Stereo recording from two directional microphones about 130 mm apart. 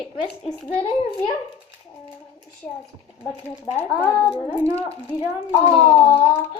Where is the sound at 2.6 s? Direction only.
10° left (ahead or behind).